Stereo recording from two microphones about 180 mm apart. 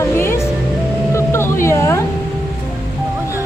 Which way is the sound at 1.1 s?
15° left (ahead or behind).